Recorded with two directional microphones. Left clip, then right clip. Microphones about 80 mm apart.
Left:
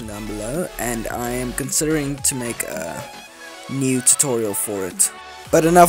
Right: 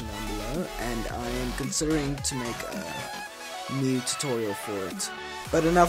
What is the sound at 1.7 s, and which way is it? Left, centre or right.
Speech, left.